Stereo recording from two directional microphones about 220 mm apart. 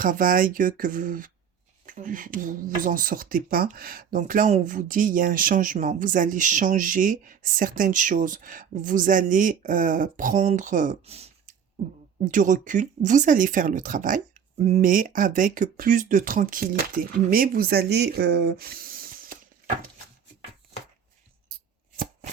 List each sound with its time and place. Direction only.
0.0 s speech: 40° right (ahead or behind)